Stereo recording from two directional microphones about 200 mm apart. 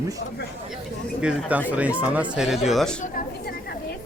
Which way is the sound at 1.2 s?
5° right (ahead or behind).